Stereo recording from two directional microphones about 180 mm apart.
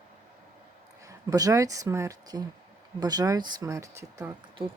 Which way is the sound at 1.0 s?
20° right (ahead or behind).